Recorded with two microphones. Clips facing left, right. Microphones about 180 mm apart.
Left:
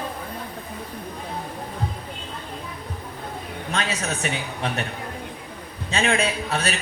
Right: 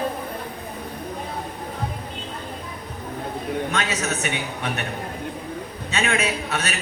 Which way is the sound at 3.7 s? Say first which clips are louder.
Right 1 dB; 35° left (ahead or behind).